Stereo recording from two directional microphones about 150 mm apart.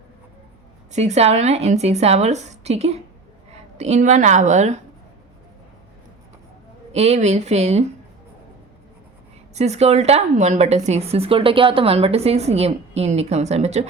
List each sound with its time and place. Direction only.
0.9 s a woman's voice: 50° right (ahead or behind)
6.9 s a woman's voice: 45° right (ahead or behind)
9.6 s a woman's voice: 45° right (ahead or behind)